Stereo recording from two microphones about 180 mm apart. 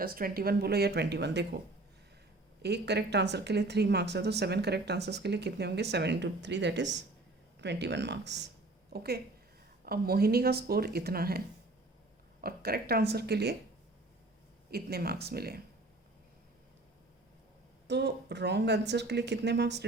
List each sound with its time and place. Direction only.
0.0 s speech: 55° right (ahead or behind)
14.7 s speech: 60° right (ahead or behind)
17.8 s speech: 70° right (ahead or behind)